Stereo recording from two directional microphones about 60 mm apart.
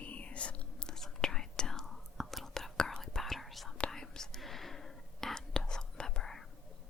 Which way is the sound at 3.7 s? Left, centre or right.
Centre.